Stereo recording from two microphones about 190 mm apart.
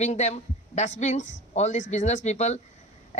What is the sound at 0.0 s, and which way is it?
Speech, 35° left (ahead or behind).